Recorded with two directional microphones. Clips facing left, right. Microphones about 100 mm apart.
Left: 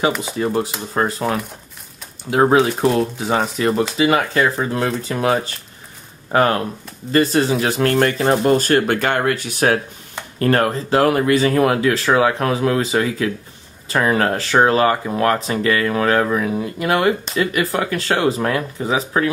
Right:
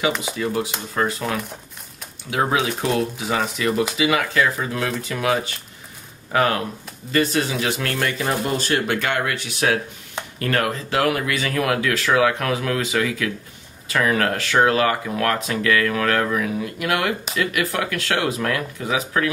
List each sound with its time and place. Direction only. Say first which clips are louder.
0.4 s speech: left 4 dB; 35° left (ahead or behind)